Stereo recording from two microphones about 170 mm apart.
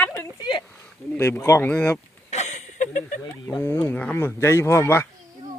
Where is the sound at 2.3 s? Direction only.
40° left (ahead or behind).